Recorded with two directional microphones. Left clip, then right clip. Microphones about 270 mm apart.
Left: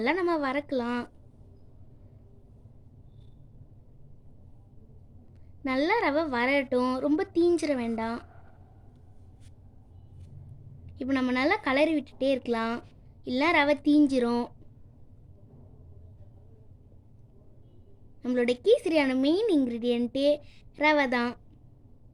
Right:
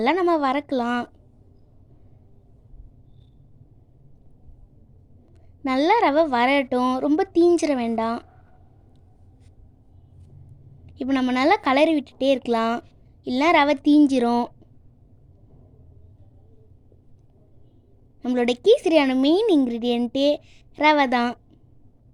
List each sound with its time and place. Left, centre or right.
0.0 s a woman's voice: right
5.6 s a woman's voice: right
10.8 s a woman's voice: right
18.2 s a woman's voice: right